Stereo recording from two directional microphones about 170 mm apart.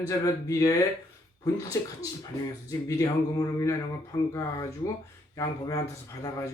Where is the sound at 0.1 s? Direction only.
20° left (ahead or behind).